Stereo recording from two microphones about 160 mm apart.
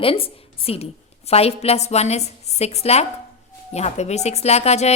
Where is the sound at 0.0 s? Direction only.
35° left (ahead or behind).